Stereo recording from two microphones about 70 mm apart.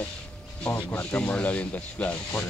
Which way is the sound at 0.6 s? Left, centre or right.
Centre.